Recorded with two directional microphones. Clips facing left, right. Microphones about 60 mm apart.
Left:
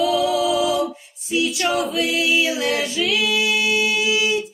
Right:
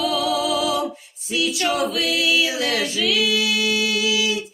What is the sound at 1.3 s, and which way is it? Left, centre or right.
A capella, left.